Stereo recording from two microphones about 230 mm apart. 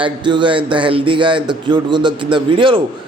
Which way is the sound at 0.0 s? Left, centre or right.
Right.